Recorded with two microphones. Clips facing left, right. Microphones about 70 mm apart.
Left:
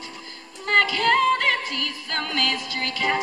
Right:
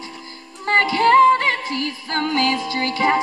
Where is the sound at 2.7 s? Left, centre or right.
Right.